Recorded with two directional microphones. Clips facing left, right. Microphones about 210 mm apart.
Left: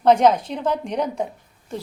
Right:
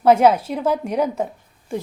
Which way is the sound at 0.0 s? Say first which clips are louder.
Right 1 dB; 10° right (ahead or behind).